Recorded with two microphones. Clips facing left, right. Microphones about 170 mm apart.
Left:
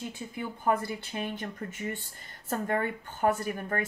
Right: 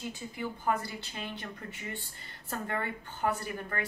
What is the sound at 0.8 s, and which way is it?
Speech, 50° left (ahead or behind).